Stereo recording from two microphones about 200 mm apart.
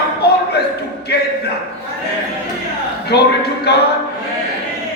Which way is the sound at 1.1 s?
55° left (ahead or behind).